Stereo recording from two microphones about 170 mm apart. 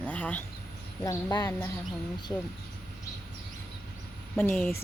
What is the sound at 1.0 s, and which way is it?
A woman's voice, 20° left (ahead or behind).